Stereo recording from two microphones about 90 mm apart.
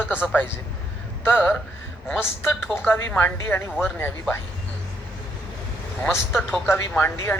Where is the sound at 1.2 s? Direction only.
20° left (ahead or behind).